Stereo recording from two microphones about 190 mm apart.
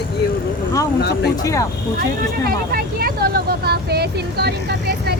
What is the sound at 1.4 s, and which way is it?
Speech, 15° left (ahead or behind).